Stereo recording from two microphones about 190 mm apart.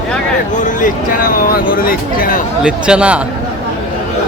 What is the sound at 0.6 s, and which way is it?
Speech, 45° left (ahead or behind).